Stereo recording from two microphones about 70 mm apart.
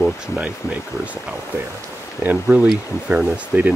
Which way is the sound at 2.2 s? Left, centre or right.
Right.